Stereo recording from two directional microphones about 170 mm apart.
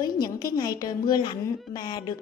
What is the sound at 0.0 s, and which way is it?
A woman's voice, 25° left (ahead or behind).